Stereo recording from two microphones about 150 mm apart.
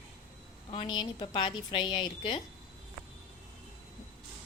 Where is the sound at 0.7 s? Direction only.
35° left (ahead or behind).